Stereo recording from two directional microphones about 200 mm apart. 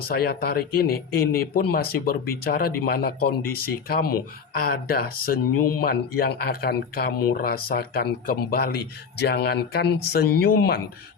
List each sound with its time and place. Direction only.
0.0 s speech: 50° left (ahead or behind)